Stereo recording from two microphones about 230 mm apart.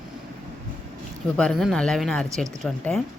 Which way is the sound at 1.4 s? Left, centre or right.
Centre.